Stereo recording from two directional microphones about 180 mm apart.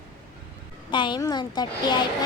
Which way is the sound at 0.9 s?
25° left (ahead or behind).